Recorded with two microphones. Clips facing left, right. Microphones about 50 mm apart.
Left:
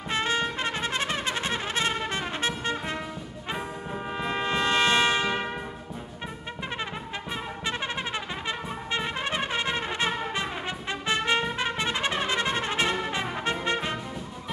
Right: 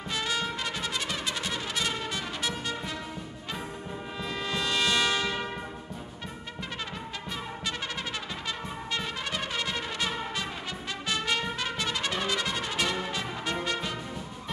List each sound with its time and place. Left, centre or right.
0.1 s brass instrument: left
4.2 s brass instrument: left
8.5 s brass instrument: left